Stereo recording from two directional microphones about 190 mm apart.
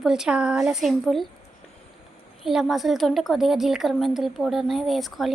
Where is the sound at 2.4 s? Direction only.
Centre (ahead or behind).